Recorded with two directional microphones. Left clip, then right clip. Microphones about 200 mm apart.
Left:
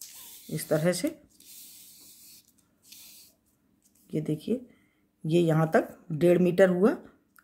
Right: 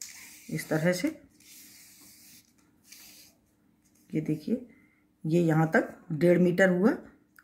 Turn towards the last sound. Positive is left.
turn(degrees=40)  # may be behind; listen again after turning